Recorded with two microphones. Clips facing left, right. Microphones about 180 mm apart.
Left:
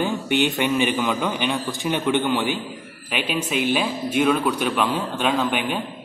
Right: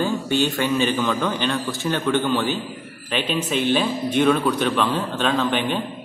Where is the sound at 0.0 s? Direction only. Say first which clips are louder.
Even; 15° left (ahead or behind).